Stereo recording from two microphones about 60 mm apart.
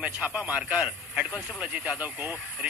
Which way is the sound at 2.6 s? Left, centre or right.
Right.